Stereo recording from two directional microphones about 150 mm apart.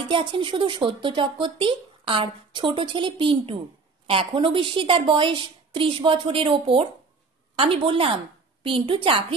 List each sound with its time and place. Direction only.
0.0 s speech: 35° right (ahead or behind)